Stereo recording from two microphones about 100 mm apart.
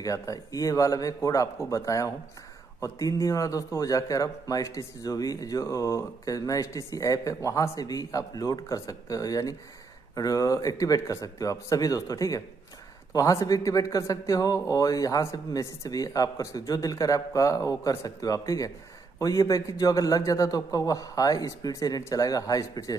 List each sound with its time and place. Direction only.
0.0 s a man's voice: 35° left (ahead or behind)